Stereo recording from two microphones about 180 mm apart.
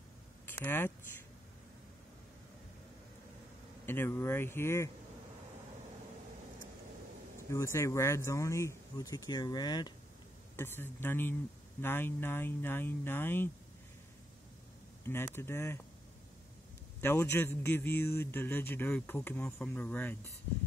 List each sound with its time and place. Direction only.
0.5 s speech: 10° left (ahead or behind)
3.8 s a man's voice: 10° left (ahead or behind)
7.5 s a man's voice: 15° left (ahead or behind)
10.5 s a man's voice: 10° left (ahead or behind)
15.0 s a man's voice: 15° left (ahead or behind)
17.0 s a man's voice: 15° left (ahead or behind)